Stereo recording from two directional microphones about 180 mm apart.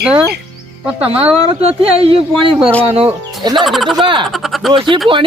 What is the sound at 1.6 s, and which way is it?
Speech, 30° right (ahead or behind).